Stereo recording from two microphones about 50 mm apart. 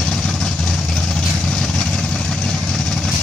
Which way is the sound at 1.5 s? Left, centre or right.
Centre.